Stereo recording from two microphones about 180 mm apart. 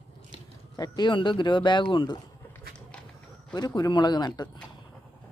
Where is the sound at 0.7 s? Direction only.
20° left (ahead or behind).